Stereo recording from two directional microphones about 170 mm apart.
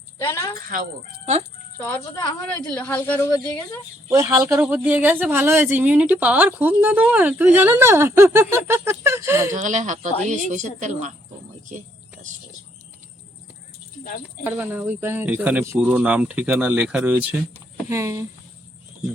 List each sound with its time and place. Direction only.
0.2 s speech: 15° left (ahead or behind)
1.2 s speech: 40° right (ahead or behind)
2.6 s speech: 10° left (ahead or behind)
3.2 s speech: 20° left (ahead or behind)
4.1 s speech: 20° right (ahead or behind)
9.5 s speech: 50° right (ahead or behind)
14.4 s speech: 10° right (ahead or behind)
17.8 s speech: 15° right (ahead or behind)